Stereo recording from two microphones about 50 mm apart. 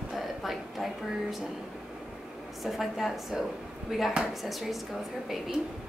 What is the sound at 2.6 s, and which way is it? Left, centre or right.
A woman's voice, centre.